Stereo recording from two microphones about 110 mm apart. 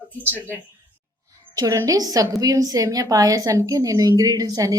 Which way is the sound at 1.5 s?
35° right (ahead or behind).